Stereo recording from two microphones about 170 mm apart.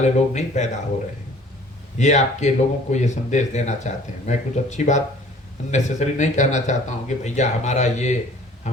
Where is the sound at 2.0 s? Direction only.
45° left (ahead or behind).